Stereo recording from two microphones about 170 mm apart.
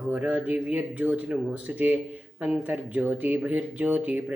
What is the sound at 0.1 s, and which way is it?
Speech, 5° right (ahead or behind).